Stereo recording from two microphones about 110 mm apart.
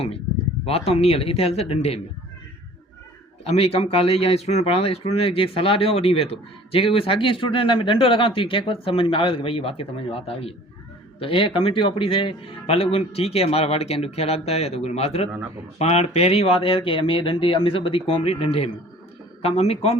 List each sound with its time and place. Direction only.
0.6 s speech: 65° left (ahead or behind)
3.4 s speech: 70° left (ahead or behind)